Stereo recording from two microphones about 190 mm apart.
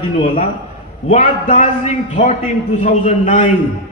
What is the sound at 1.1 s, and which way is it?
A man's voice, 45° left (ahead or behind).